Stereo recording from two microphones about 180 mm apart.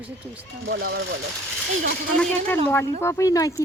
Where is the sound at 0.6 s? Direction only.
60° right (ahead or behind).